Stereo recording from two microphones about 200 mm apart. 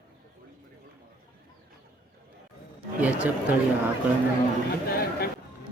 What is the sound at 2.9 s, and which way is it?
Chatter, 5° right (ahead or behind).